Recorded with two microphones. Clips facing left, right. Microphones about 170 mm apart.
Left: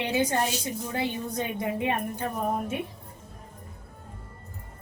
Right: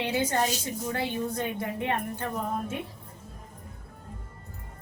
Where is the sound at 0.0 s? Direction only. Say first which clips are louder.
Left 2 dB; 15° left (ahead or behind).